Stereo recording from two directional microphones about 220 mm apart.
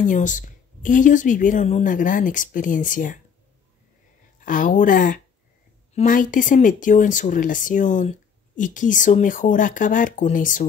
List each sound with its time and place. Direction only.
0.0 s speech: 35° left (ahead or behind)
4.5 s speech: 35° left (ahead or behind)